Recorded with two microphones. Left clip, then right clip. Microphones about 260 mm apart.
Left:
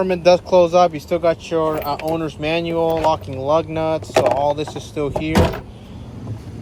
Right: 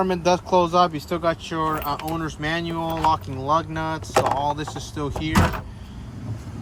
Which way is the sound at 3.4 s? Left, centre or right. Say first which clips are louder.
Left 5 dB; right.